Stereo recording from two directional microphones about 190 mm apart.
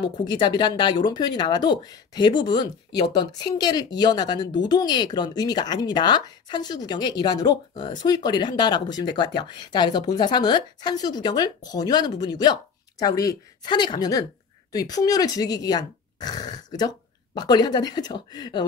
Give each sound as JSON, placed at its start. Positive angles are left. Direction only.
{"t": 0.0, "sound": "speech", "side_deg": 25}